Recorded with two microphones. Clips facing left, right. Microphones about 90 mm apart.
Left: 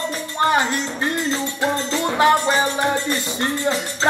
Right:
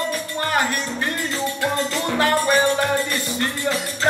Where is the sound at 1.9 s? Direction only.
20° left (ahead or behind).